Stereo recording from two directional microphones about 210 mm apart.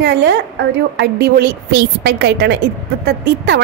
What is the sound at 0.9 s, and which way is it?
A woman's voice, 50° right (ahead or behind).